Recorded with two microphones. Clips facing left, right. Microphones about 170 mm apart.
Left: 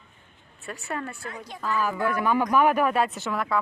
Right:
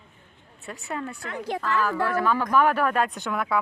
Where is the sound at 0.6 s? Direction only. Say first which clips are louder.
Even; 20° right (ahead or behind).